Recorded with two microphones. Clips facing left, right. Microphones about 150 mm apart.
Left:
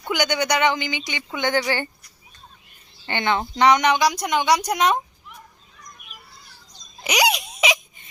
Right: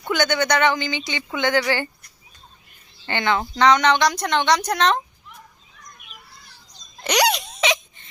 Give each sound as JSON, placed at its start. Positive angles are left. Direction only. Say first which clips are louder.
{"t": 0.0, "sound": "speech", "louder": "right 2 dB", "side_deg": 15}
{"t": 3.1, "sound": "speech", "louder": "right 1 dB", "side_deg": 20}
{"t": 7.0, "sound": "a sound", "louder": "right 2 dB", "side_deg": 5}